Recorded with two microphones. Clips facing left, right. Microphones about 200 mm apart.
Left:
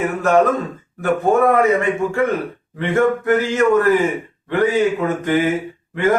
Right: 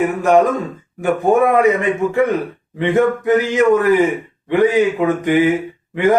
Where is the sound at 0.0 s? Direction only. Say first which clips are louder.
Right 2 dB; 15° right (ahead or behind).